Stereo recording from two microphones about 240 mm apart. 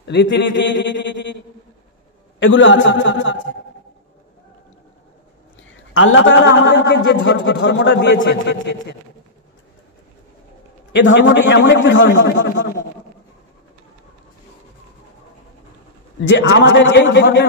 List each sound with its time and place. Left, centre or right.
0.0 s a man's voice: left
2.4 s a man's voice: left
5.9 s a man's voice: left
10.9 s a man's voice: left
16.3 s a man's voice: left